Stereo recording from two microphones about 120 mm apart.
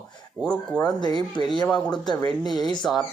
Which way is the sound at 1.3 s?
40° left (ahead or behind).